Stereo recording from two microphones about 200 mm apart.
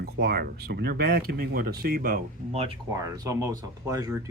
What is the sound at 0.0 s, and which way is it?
Speech, 50° right (ahead or behind).